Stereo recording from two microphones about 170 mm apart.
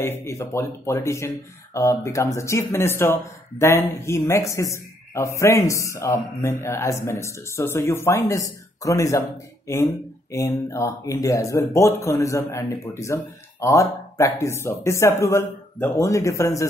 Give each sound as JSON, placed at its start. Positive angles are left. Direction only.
{"t": 0.0, "sound": "speech", "side_deg": 15}
{"t": 10.3, "sound": "speech", "side_deg": 15}